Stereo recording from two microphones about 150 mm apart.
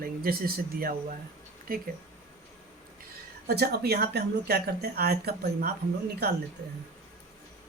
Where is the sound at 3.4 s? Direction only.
90° right.